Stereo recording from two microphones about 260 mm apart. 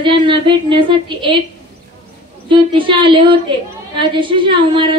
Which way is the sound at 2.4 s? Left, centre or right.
Centre.